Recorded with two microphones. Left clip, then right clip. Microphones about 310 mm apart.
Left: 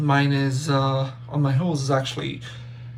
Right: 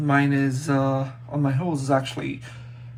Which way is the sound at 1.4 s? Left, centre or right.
Right.